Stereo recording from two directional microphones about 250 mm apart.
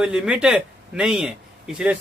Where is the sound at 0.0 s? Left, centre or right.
Centre.